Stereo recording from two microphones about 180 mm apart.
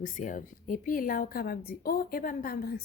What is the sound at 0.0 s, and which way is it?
Speech, 45° left (ahead or behind).